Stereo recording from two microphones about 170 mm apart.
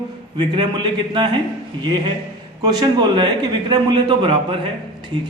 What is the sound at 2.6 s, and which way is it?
A man's voice, 25° right (ahead or behind).